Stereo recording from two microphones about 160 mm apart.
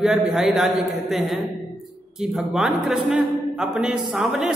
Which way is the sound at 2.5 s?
5° right (ahead or behind).